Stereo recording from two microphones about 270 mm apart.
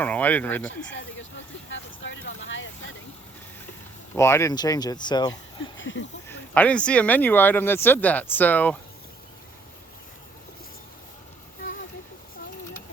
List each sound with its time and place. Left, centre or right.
0.0 s speech: centre
0.6 s speech: left
1.7 s vehicle: left
4.1 s speech: centre
5.3 s speech: left
6.2 s speech: centre